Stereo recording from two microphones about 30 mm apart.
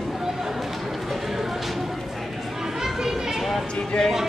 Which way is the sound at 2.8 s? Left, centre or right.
Centre.